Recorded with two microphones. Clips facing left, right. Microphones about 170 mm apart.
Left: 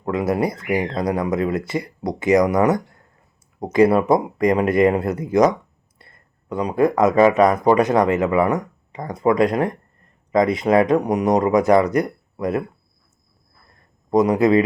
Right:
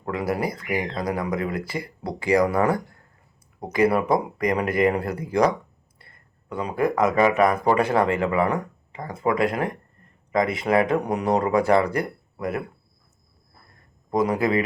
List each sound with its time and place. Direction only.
0.0 s speech: 25° left (ahead or behind)
14.1 s speech: 20° left (ahead or behind)